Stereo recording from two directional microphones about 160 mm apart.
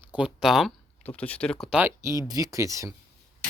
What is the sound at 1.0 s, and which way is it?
Speech, 10° left (ahead or behind).